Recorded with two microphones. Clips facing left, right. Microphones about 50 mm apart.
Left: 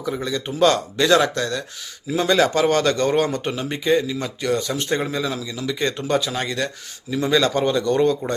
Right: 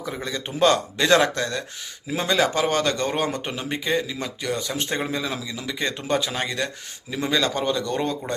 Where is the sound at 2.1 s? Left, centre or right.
Centre.